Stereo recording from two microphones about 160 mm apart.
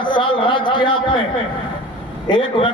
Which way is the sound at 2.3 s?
30° left (ahead or behind).